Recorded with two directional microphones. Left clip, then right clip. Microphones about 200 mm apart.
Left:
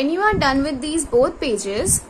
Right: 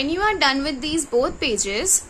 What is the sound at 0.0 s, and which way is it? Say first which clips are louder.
A woman's voice: left 2 dB; 25° right (ahead or behind).